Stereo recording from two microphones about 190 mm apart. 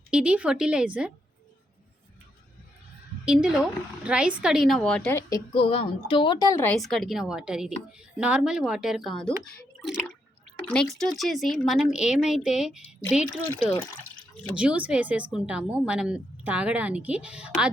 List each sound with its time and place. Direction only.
0.1 s speech: 5° right (ahead or behind)
3.2 s speech: 5° right (ahead or behind)
5.3 s a woman's voice: 30° left (ahead or behind)
6.7 s speech: centre (ahead or behind)
14.5 s speech: 5° right (ahead or behind)